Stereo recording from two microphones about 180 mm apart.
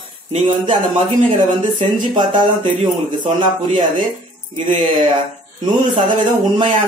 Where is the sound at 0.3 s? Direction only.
35° right (ahead or behind).